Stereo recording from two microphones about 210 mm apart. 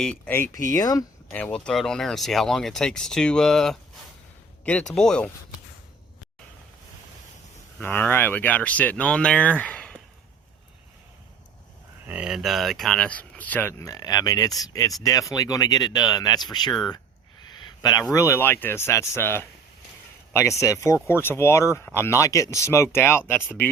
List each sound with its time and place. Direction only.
0.0 s speech: 5° left (ahead or behind)
1.3 s speech: 5° left (ahead or behind)
7.8 s speech: 10° left (ahead or behind)
12.0 s speech: 5° right (ahead or behind); by 16.7 s 20° left (ahead or behind)
17.5 s a sound: 20° left (ahead or behind)
18.1 s speech: 15° left (ahead or behind)